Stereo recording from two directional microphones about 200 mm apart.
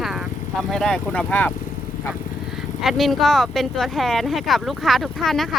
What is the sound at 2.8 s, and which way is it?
Speech, centre (ahead or behind).